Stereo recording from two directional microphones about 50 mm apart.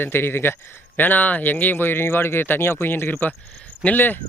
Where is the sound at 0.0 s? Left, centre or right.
Left.